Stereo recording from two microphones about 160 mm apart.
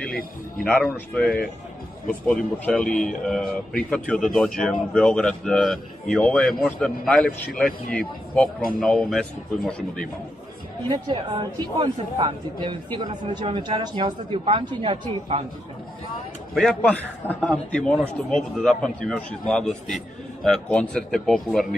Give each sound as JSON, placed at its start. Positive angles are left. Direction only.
{"t": 0.7, "sound": "a man's voice", "side_deg": 0}
{"t": 10.9, "sound": "a woman's voice", "side_deg": -30}
{"t": 16.5, "sound": "a man's voice", "side_deg": 5}